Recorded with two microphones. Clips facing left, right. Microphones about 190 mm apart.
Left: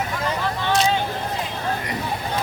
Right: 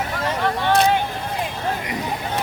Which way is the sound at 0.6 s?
55° right (ahead or behind).